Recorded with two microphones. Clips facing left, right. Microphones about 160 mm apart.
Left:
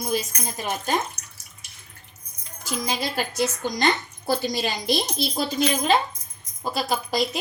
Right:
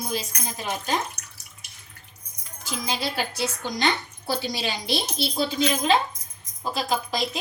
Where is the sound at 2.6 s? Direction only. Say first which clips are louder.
Left 2 dB; 45° left (ahead or behind).